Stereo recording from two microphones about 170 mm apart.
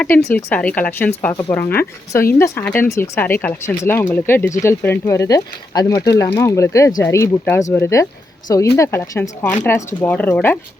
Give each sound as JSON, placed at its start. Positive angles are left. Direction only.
{"t": 0.0, "sound": "speech", "side_deg": 10}